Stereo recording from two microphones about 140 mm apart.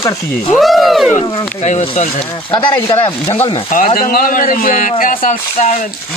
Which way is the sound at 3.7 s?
80° left.